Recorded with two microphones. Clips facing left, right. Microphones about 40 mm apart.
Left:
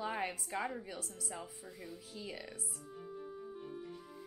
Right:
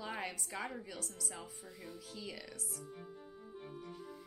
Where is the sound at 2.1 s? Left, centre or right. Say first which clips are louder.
Left 2 dB; centre.